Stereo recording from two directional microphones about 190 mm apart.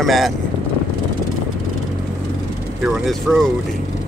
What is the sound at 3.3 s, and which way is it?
Speech, centre (ahead or behind).